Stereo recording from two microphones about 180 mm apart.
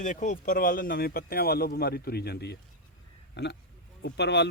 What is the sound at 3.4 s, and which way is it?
Speech, 75° left (ahead or behind).